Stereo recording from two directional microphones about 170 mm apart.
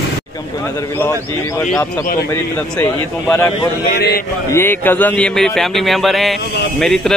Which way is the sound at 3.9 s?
65° left (ahead or behind).